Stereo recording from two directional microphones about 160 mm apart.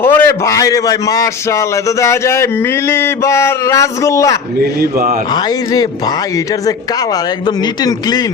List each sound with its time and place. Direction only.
0.0 s a man's voice: 15° left (ahead or behind)
4.8 s a man's voice: 65° right (ahead or behind)
5.3 s a man's voice: 25° left (ahead or behind)